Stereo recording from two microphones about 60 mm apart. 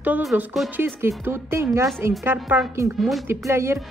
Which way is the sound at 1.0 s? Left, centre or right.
Right.